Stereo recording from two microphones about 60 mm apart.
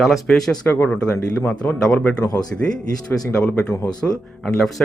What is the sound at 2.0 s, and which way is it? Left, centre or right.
Speech, centre.